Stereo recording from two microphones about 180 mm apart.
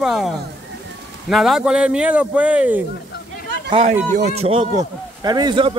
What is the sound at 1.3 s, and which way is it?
Speech, centre (ahead or behind).